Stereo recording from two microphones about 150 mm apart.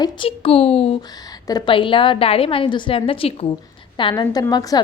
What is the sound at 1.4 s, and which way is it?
A woman's voice, 30° left (ahead or behind).